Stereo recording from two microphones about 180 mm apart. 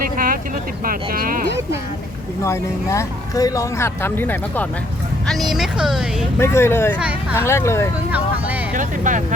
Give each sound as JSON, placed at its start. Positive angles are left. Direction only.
{"t": 0.0, "sound": "vehicle", "side_deg": -50}
{"t": 0.9, "sound": "speech", "side_deg": -55}
{"t": 2.4, "sound": "speech", "side_deg": 15}
{"t": 5.5, "sound": "speech", "side_deg": 0}
{"t": 6.4, "sound": "speech", "side_deg": 15}
{"t": 7.0, "sound": "speech", "side_deg": -5}
{"t": 7.3, "sound": "speech", "side_deg": 15}
{"t": 8.7, "sound": "speech", "side_deg": -45}